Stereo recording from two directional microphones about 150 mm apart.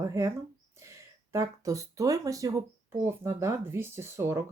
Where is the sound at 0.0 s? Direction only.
20° right (ahead or behind).